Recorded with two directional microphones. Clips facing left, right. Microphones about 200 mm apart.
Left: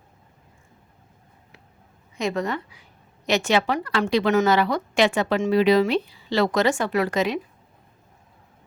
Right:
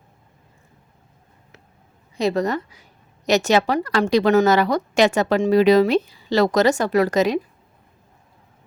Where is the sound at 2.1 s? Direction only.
35° right (ahead or behind).